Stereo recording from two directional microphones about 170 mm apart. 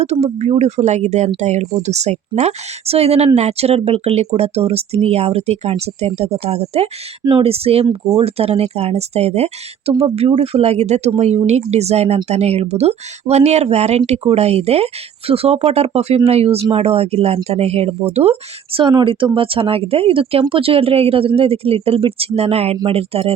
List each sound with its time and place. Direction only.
0.0 s speech: 35° right (ahead or behind)